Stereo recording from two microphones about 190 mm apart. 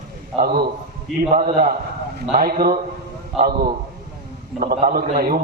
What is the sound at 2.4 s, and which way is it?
Speech, 50° right (ahead or behind).